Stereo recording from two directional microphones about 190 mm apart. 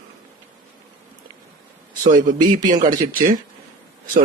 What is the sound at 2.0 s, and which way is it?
Speech, 40° right (ahead or behind).